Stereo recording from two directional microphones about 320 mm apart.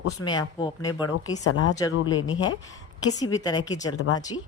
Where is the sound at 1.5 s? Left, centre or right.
Left.